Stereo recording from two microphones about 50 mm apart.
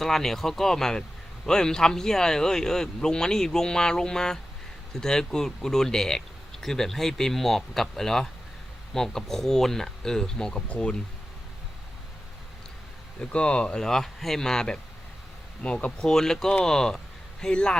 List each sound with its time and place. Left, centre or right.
0.0 s speech: centre
13.3 s speech: left
16.0 s speech: centre